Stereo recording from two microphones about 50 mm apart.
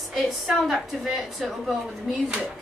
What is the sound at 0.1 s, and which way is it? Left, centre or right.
A woman's voice, centre.